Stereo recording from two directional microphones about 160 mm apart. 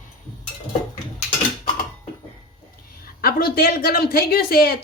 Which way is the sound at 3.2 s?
70° left (ahead or behind).